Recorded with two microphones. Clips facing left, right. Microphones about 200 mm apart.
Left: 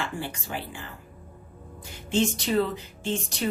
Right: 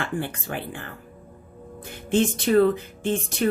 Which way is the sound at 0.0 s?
55° right (ahead or behind).